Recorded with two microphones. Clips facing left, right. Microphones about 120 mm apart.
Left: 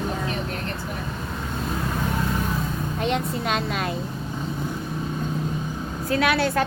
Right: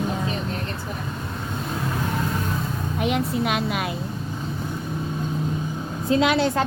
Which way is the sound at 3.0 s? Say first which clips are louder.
Right 3 dB; 5° right (ahead or behind).